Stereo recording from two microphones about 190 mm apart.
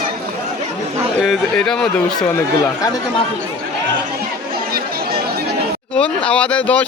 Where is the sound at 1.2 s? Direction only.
Centre (ahead or behind).